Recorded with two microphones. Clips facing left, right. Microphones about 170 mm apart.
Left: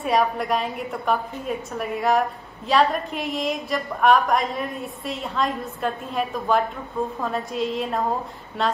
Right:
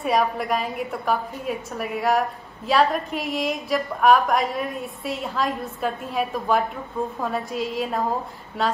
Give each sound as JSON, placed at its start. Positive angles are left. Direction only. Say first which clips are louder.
{"t": 0.0, "sound": "a woman's voice", "louder": "even", "side_deg": 0}